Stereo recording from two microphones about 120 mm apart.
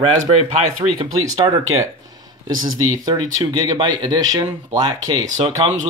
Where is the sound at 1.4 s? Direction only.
30° right (ahead or behind).